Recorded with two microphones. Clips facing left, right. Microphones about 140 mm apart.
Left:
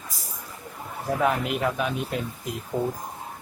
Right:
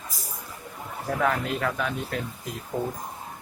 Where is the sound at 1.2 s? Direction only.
20° left (ahead or behind).